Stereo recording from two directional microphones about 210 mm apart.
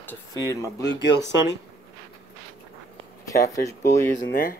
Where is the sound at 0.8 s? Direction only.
55° left (ahead or behind).